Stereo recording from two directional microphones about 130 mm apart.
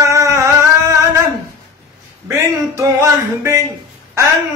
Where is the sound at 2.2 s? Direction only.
20° right (ahead or behind).